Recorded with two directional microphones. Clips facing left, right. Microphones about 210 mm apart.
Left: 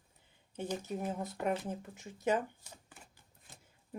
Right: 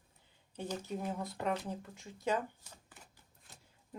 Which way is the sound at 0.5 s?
10° left (ahead or behind).